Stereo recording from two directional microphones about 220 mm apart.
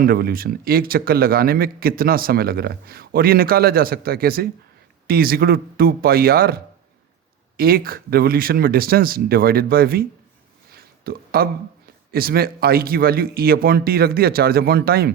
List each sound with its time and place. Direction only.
0.0 s speech: 45° right (ahead or behind)
10.7 s a sound: 45° right (ahead or behind)
12.1 s speech: 45° right (ahead or behind)